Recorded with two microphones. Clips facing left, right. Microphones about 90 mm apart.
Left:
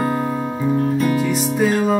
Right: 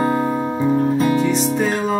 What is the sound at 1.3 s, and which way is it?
Music, 5° left (ahead or behind).